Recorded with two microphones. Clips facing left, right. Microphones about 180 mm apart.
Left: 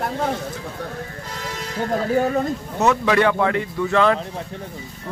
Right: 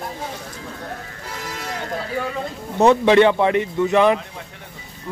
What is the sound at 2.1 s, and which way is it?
Speech, 45° left (ahead or behind).